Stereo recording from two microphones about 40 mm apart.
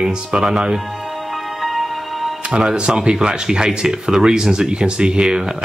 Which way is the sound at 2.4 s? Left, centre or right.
Right.